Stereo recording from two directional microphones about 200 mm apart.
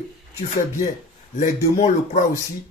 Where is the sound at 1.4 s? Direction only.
35° left (ahead or behind).